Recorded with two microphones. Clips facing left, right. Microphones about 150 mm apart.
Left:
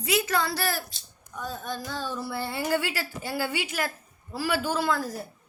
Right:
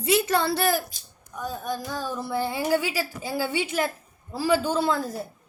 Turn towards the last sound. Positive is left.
turn(degrees=-25)  # may be behind; listen again after turning